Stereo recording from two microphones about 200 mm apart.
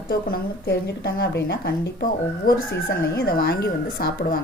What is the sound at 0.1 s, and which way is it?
Speech, 50° left (ahead or behind).